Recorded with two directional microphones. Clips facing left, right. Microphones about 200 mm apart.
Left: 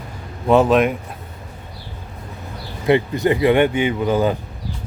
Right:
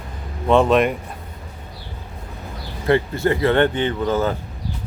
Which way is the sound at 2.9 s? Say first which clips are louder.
Left 2 dB; 15° left (ahead or behind).